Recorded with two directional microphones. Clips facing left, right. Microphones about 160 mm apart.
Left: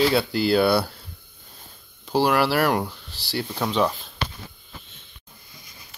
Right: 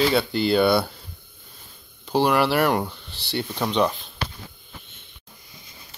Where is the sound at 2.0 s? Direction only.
Centre (ahead or behind).